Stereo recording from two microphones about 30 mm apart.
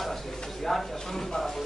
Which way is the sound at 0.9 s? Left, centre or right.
Centre.